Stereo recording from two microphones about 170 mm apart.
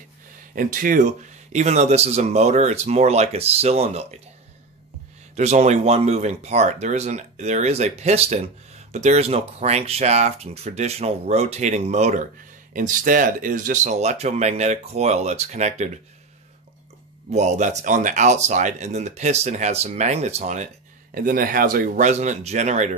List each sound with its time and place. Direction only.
0.6 s speech: 55° right (ahead or behind); by 4.1 s 40° right (ahead or behind)
5.3 s speech: 40° right (ahead or behind)
17.3 s speech: 40° right (ahead or behind)